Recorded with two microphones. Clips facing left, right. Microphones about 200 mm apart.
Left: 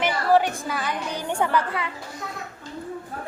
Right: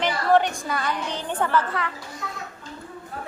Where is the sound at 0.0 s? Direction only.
5° left (ahead or behind).